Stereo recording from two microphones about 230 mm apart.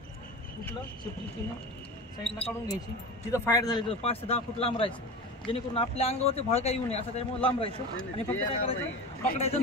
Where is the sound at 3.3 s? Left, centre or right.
Centre.